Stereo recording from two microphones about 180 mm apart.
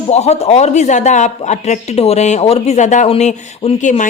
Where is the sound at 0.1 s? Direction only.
35° left (ahead or behind).